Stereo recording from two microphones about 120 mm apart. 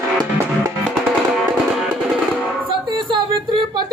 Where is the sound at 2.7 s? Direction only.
40° right (ahead or behind).